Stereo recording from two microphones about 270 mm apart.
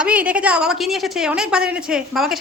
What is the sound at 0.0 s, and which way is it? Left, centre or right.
A woman's voice, centre.